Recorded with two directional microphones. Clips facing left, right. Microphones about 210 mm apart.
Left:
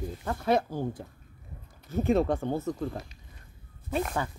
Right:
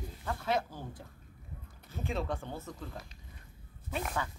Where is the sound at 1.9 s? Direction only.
45° left (ahead or behind).